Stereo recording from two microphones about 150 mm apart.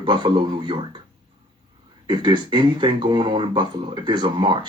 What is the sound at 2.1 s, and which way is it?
Speech, 30° right (ahead or behind).